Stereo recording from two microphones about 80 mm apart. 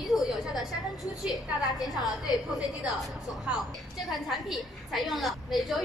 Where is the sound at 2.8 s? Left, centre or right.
Centre.